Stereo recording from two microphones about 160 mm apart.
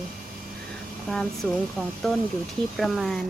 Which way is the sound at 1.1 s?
5° left (ahead or behind).